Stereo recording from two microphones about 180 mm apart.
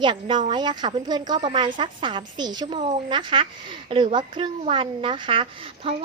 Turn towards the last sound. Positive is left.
turn(degrees=-30)  # may be behind; listen again after turning